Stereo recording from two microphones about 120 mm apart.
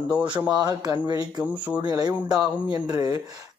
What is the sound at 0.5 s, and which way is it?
A woman's voice, 35° right (ahead or behind).